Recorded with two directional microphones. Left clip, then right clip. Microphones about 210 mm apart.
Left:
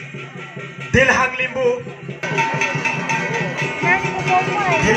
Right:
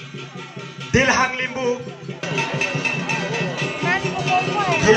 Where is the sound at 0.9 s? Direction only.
45° left (ahead or behind).